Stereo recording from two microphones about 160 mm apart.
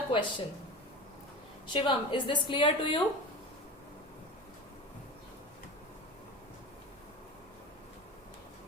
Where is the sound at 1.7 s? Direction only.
30° left (ahead or behind).